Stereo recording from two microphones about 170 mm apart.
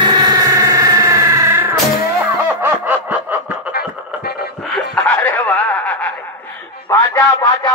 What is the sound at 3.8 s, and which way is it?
Music, 65° left (ahead or behind).